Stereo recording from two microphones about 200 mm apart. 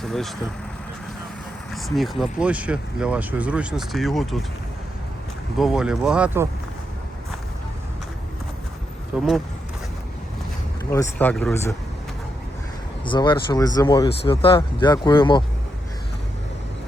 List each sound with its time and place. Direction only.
0.0 s speech: centre (ahead or behind)
1.7 s speech: centre (ahead or behind)
5.5 s speech: 5° right (ahead or behind)
9.1 s speech: 5° right (ahead or behind)
10.9 s speech: 10° left (ahead or behind)
13.1 s speech: 25° left (ahead or behind)